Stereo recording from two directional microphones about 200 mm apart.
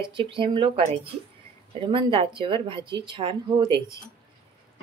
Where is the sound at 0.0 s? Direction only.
25° right (ahead or behind).